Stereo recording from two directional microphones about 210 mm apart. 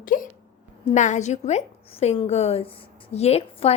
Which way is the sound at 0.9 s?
35° left (ahead or behind).